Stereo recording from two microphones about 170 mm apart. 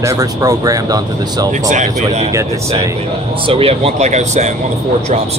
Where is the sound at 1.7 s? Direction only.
45° right (ahead or behind).